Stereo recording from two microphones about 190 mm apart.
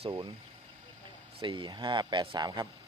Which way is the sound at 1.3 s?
25° right (ahead or behind).